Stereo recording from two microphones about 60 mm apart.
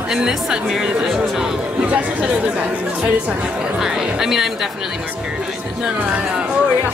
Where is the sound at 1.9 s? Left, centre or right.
Right.